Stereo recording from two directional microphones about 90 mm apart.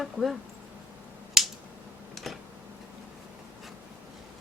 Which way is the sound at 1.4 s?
5° right (ahead or behind).